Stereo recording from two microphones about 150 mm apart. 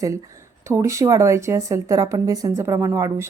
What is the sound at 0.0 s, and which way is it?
Speech, 20° right (ahead or behind).